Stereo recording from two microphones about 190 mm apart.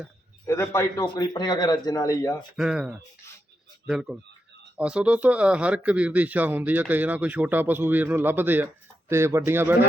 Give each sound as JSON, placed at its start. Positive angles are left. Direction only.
{"t": 0.4, "sound": "a man's voice", "side_deg": 15}
{"t": 2.6, "sound": "speech", "side_deg": -5}